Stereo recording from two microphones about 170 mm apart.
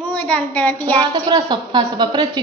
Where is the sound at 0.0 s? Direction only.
10° left (ahead or behind).